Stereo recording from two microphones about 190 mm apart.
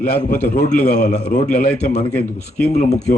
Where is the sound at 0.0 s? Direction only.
50° left (ahead or behind).